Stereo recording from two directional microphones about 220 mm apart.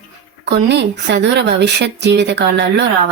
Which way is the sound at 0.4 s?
50° right (ahead or behind).